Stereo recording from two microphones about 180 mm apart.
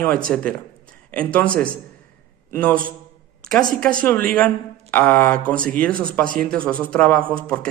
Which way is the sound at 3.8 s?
5° left (ahead or behind).